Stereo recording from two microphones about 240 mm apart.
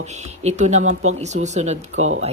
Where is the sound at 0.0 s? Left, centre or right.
Right.